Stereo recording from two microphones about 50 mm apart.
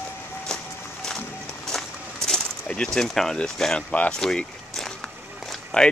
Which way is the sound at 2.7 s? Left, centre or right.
Centre.